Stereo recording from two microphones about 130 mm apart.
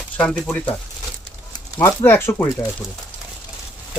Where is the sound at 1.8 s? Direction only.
20° left (ahead or behind).